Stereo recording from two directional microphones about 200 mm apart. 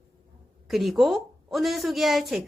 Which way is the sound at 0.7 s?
Centre (ahead or behind).